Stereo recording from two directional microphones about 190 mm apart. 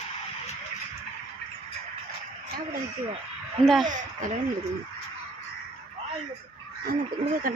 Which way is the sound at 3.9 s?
40° right (ahead or behind).